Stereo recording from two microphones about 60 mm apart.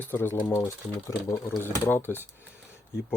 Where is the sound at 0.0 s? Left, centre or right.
Left.